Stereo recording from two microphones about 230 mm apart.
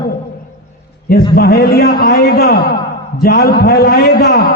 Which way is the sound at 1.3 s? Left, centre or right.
Left.